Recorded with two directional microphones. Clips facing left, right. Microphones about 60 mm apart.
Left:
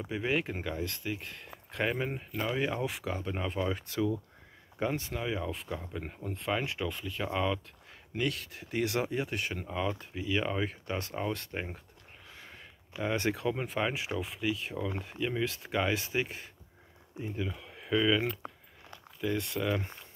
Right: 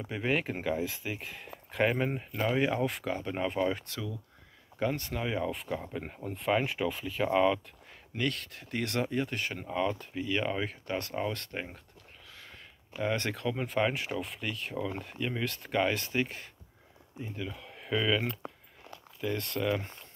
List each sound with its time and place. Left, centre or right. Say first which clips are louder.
0.0 s speech: right 1 dB; centre
2.8 s speech: right 3 dB; centre
3.8 s speech: left 8 dB; left
4.7 s speech: right 1 dB; centre
5.2 s speech: right 2 dB; centre
8.2 s speech: even; centre
12.3 s a sound: left 1 dB; centre
13.0 s speech: left 1 dB; centre
19.2 s speech: even; centre